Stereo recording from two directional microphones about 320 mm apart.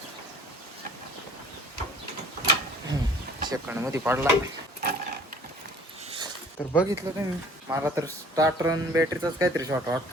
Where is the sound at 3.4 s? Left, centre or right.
Centre.